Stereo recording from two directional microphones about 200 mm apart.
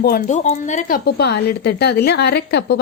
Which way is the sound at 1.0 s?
55° left (ahead or behind).